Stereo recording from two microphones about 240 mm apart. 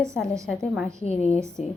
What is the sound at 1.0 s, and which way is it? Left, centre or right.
Speech, left.